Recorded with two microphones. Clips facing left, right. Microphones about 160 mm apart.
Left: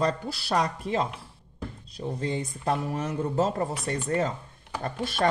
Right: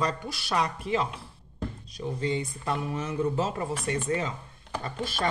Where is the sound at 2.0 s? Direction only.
40° left (ahead or behind).